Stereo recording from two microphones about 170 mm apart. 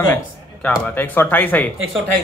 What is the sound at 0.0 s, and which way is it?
Speech, 10° left (ahead or behind).